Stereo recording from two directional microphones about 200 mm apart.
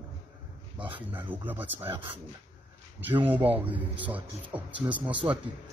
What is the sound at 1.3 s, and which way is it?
Speech, 10° right (ahead or behind).